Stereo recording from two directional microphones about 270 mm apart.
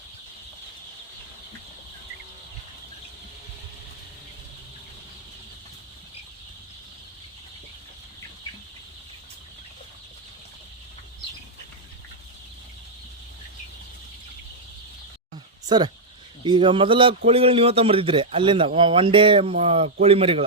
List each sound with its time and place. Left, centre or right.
15.7 s a man's voice: centre